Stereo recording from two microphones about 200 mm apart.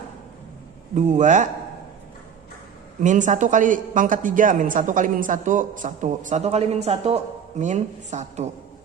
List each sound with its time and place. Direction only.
0.9 s a woman's voice: 35° right (ahead or behind)
3.0 s a woman's voice: 40° right (ahead or behind)